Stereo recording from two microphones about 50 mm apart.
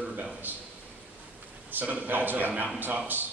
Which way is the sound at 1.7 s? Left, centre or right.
Right.